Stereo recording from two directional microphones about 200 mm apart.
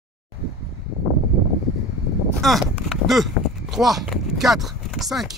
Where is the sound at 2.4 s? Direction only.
Centre (ahead or behind).